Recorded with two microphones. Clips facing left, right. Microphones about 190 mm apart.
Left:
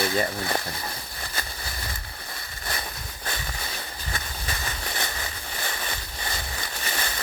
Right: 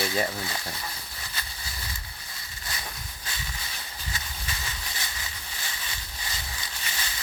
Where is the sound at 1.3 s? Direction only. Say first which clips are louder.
Left 6 dB; 55° left (ahead or behind).